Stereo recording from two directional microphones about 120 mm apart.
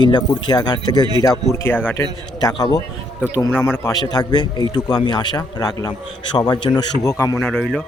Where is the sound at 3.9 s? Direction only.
35° left (ahead or behind).